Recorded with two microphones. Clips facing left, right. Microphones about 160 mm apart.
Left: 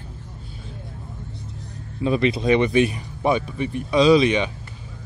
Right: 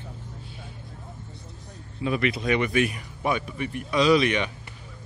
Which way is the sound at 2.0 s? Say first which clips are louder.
Left 6 dB; 30° left (ahead or behind).